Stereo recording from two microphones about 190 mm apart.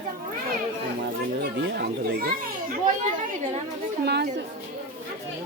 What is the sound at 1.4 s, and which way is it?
Children playing, 55° right (ahead or behind).